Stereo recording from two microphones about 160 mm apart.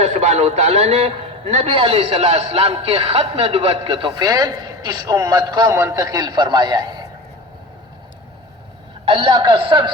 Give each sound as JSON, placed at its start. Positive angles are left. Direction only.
{"t": 0.0, "sound": "a man's voice", "side_deg": -40}
{"t": 9.0, "sound": "a man's voice", "side_deg": -35}